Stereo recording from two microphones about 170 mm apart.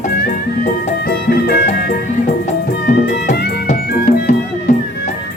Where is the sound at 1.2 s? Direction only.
60° left (ahead or behind).